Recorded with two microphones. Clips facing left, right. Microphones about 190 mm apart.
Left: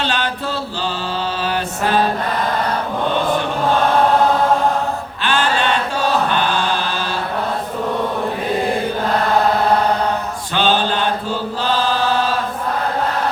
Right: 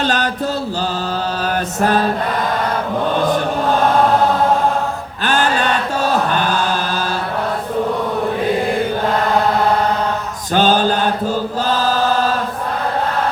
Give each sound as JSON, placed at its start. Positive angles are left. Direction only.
{"t": 0.0, "sound": "chant", "side_deg": -45}
{"t": 1.8, "sound": "mantra", "side_deg": -45}
{"t": 5.2, "sound": "chant", "side_deg": -45}
{"t": 10.5, "sound": "mantra", "side_deg": -45}